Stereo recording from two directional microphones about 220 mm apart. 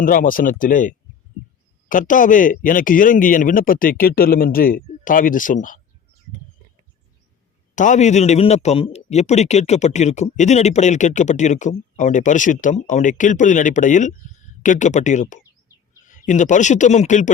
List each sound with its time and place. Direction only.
0.0 s a man's voice: 40° left (ahead or behind)
7.8 s a man's voice: 35° left (ahead or behind)